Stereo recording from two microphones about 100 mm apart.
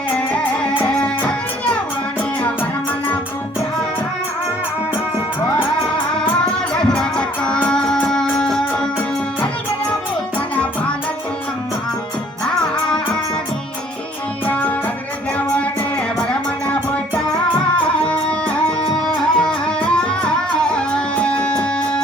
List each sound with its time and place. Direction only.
1.0 s music: 10° left (ahead or behind)
6.1 s music: 5° left (ahead or behind)
14.4 s music: 15° left (ahead or behind)
18.0 s music: 10° left (ahead or behind)